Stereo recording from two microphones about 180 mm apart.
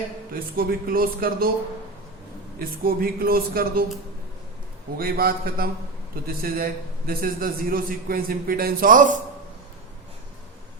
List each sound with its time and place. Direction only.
0.3 s speech: 55° right (ahead or behind)
2.6 s speech: 55° right (ahead or behind)
4.9 s a man's voice: 55° right (ahead or behind)